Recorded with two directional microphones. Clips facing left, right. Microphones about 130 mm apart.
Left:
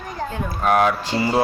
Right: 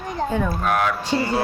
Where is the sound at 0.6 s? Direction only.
20° left (ahead or behind).